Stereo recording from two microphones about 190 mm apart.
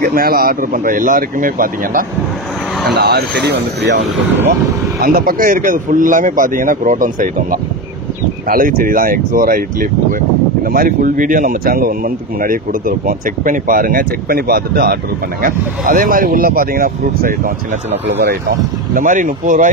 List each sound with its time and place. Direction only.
0.0 s speech: 50° right (ahead or behind)
2.9 s speech: 60° right (ahead or behind)
4.0 s speech: 10° right (ahead or behind)
5.0 s speech: 50° right (ahead or behind)
18.9 s speech: 45° right (ahead or behind)